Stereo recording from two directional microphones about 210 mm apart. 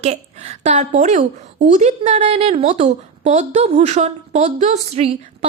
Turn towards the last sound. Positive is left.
turn(degrees=-30)  # may be behind; listen again after turning